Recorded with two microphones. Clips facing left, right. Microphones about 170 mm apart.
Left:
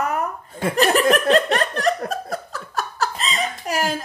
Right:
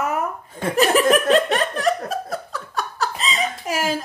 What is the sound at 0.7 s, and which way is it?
Laughter, centre (ahead or behind).